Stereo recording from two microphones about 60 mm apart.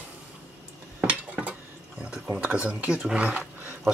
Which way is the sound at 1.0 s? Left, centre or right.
Right.